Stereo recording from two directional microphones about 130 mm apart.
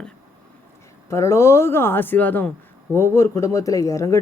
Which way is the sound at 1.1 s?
20° left (ahead or behind).